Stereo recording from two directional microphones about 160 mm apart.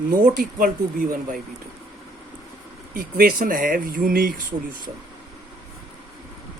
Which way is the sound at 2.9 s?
65° right (ahead or behind).